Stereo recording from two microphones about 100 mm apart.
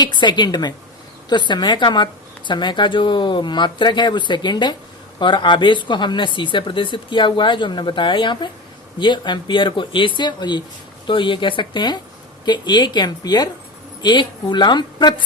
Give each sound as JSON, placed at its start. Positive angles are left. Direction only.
{"t": 0.0, "sound": "speech", "side_deg": 50}